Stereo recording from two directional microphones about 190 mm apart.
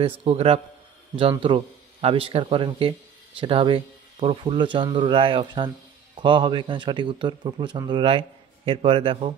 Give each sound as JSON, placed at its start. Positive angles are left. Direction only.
{"t": 0.0, "sound": "a man's voice", "side_deg": -30}